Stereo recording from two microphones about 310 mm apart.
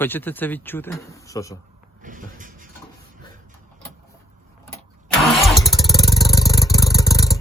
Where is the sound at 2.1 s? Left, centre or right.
Right.